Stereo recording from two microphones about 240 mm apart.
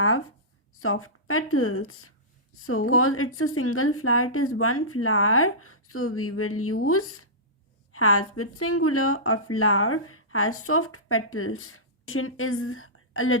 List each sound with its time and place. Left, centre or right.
0.8 s speech: left